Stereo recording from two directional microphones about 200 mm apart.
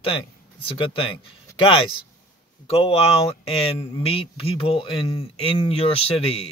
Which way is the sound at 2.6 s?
30° left (ahead or behind).